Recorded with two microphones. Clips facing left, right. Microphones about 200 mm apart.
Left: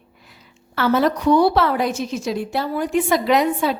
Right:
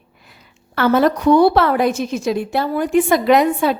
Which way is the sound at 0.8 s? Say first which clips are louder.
Right 3 dB; 55° right (ahead or behind).